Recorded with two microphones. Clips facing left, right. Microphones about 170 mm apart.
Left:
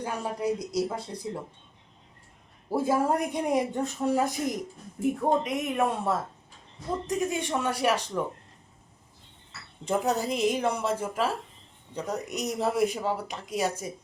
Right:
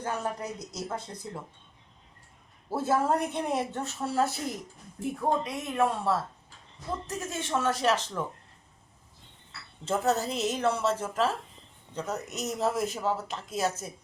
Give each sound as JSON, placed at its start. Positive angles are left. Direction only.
{"t": 0.0, "sound": "speech", "side_deg": 10}
{"t": 2.7, "sound": "speech", "side_deg": 10}
{"t": 9.8, "sound": "speech", "side_deg": 15}